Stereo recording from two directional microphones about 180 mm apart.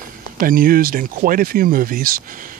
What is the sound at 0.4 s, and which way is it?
Speech, 50° right (ahead or behind).